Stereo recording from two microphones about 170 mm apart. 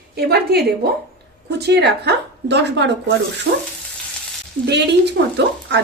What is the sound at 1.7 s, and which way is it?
A woman's voice, 80° right.